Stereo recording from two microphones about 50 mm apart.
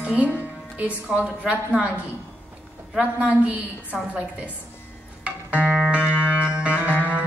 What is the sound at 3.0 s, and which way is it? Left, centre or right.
A woman's voice, right.